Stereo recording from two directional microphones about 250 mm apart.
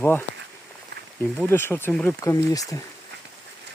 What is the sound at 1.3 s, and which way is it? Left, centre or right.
Speech, centre.